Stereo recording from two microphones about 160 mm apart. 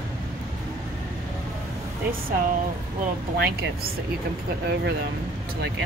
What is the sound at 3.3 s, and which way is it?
Speech, 80° right.